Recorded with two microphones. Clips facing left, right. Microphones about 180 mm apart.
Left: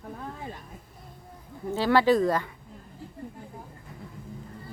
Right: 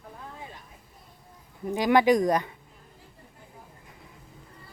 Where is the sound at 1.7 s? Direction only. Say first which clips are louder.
Right 1 dB; 15° right (ahead or behind).